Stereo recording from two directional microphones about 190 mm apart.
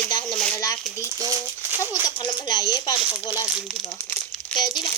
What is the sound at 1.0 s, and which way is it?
Speech, 15° right (ahead or behind).